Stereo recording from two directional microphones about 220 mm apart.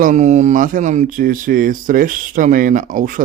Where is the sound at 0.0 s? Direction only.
35° right (ahead or behind).